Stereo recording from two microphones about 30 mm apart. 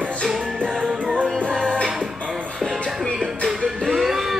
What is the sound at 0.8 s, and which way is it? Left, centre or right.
Music, right.